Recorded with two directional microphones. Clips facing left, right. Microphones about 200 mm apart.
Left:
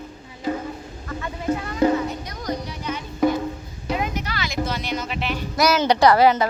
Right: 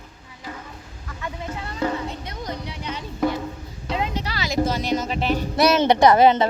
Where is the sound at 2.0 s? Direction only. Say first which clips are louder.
Left 3 dB; 25° right (ahead or behind).